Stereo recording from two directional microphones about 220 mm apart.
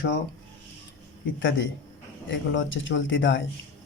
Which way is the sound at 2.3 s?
55° left (ahead or behind).